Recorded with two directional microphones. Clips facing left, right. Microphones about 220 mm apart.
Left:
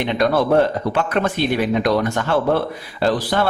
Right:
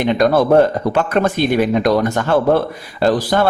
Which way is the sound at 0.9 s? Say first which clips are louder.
Right 4 dB; 45° right (ahead or behind).